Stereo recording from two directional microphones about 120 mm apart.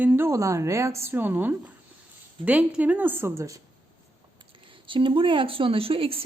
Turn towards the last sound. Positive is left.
turn(degrees=-50)  # may be behind; listen again after turning